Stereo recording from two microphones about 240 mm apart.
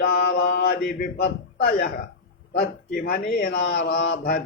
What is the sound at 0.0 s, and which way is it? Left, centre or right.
Mantra, left.